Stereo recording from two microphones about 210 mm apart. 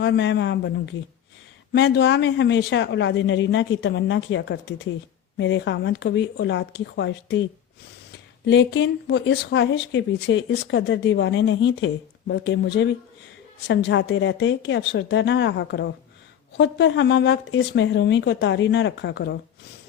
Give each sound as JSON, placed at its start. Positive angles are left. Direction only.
{"t": 0.0, "sound": "speech", "side_deg": 55}
{"t": 8.4, "sound": "speech", "side_deg": 60}